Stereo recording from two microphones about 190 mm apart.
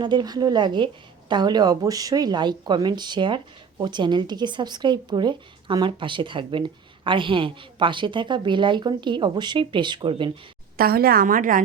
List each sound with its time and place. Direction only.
0.0 s a woman's voice: 25° right (ahead or behind)
10.8 s a woman's voice: 50° right (ahead or behind)